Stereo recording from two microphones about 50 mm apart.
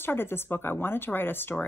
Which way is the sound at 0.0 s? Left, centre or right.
Left.